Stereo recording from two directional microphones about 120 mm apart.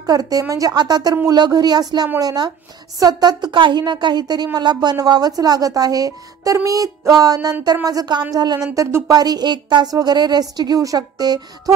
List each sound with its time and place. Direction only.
0.0 s a woman's voice: 30° right (ahead or behind)